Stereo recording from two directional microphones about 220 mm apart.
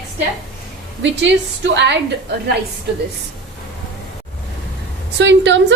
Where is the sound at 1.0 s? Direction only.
55° right (ahead or behind).